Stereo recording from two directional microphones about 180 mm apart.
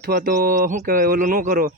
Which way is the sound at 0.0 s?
60° right (ahead or behind).